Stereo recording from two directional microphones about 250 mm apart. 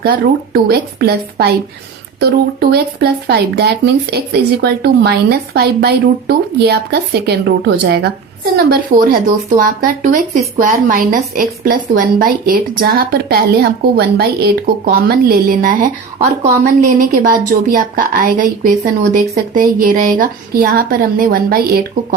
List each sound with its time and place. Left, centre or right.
0.5 s speech: right